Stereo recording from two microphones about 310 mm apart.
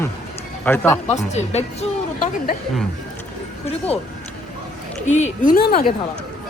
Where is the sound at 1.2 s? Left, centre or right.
Left.